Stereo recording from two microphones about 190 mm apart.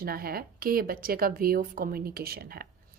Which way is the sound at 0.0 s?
50° right (ahead or behind).